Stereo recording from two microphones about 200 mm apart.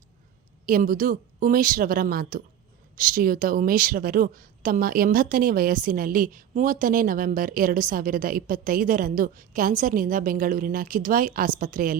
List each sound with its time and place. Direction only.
0.6 s a woman's voice: 45° right (ahead or behind)